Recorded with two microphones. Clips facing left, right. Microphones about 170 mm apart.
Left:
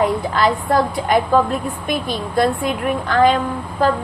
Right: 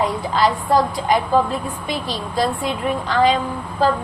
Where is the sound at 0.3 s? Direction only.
55° left (ahead or behind).